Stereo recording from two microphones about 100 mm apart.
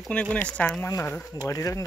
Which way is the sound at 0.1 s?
10° left (ahead or behind).